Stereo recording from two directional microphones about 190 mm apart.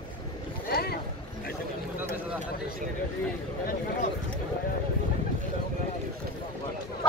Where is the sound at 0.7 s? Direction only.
55° left (ahead or behind).